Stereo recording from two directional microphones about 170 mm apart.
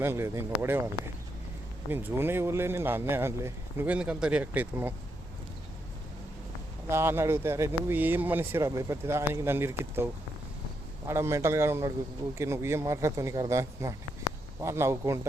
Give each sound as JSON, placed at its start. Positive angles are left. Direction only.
{"t": 0.0, "sound": "speech", "side_deg": -15}
{"t": 1.9, "sound": "speech", "side_deg": -10}
{"t": 6.8, "sound": "speech", "side_deg": -15}